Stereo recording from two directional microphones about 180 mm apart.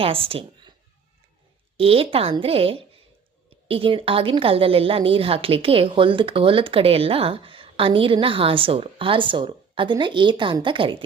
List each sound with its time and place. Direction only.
0.0 s a woman's voice: 30° right (ahead or behind)
1.7 s a woman's voice: 30° right (ahead or behind)